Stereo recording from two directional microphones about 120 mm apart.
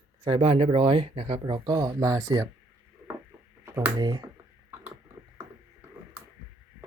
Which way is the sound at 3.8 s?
35° right (ahead or behind).